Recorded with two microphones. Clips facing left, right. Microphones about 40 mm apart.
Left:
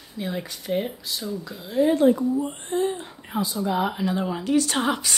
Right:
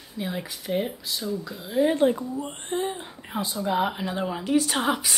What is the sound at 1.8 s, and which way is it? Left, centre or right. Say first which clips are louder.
Speech: left 3 dB; centre.